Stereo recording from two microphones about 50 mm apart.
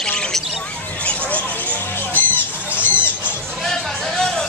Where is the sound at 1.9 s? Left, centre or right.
Left.